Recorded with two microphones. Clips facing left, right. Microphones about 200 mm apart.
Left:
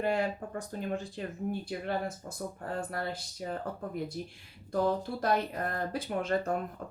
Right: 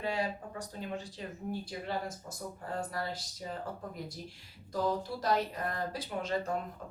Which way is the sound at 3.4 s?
55° left (ahead or behind).